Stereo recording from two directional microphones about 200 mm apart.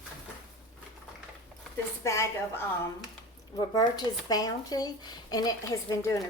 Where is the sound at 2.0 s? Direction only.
15° left (ahead or behind).